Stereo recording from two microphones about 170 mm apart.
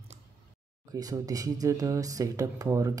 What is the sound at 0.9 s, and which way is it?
Speech, 20° right (ahead or behind).